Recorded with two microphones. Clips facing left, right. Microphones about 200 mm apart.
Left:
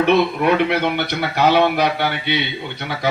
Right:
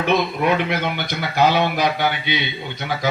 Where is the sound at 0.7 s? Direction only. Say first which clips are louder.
Left 4 dB; 60° left (ahead or behind).